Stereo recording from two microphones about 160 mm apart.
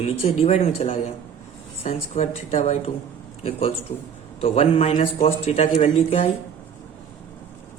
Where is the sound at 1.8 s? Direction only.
50° left (ahead or behind).